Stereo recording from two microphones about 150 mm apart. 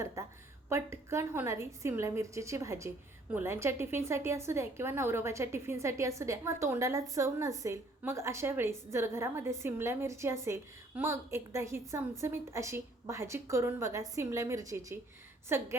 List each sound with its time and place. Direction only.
0.7 s a woman's voice: 20° right (ahead or behind)